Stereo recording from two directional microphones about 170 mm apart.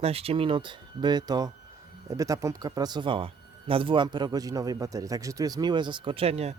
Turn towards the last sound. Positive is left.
turn(degrees=-35)  # may be behind; listen again after turning